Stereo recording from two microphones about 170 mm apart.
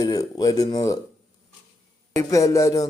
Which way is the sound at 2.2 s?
20° left (ahead or behind).